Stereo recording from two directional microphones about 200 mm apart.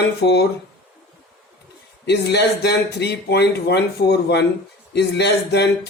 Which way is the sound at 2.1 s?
55° left (ahead or behind).